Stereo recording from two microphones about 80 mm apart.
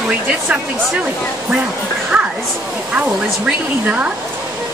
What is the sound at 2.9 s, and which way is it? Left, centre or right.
Speech, centre.